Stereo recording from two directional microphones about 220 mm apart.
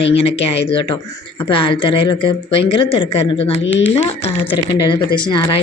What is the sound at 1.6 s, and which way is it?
A woman's voice, 25° left (ahead or behind).